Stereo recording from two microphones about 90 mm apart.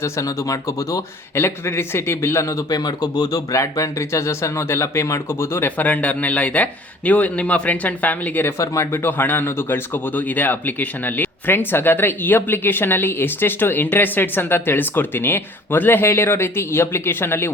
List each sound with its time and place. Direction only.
0.0 s speech: 40° left (ahead or behind)
1.4 s speech: 30° left (ahead or behind)